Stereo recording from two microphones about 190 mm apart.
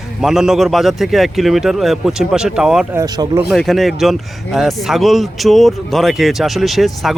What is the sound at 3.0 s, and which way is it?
Speech, 20° right (ahead or behind).